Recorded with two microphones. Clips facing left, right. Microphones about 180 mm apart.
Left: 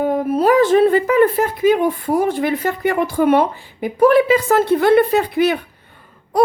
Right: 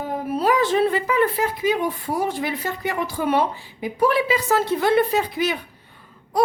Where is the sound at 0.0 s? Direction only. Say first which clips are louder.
Left 7 dB; 50° left (ahead or behind).